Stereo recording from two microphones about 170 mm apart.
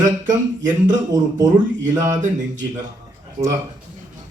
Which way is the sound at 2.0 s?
45° right (ahead or behind).